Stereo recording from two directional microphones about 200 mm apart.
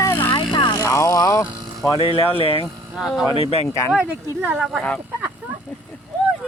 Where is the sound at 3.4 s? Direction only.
30° left (ahead or behind).